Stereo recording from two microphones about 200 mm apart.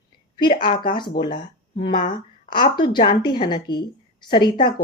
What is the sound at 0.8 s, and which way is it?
Speech, 25° left (ahead or behind).